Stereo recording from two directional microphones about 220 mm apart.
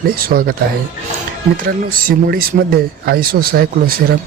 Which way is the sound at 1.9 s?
40° right (ahead or behind).